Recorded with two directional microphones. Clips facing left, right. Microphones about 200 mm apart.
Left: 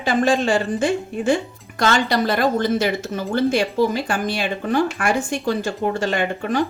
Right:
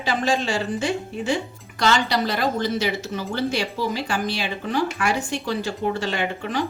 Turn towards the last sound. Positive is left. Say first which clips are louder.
# left 4 dB
turn(degrees=50)  # may be behind; listen again after turning